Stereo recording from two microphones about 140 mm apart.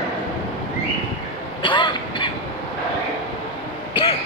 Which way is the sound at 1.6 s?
35° left (ahead or behind).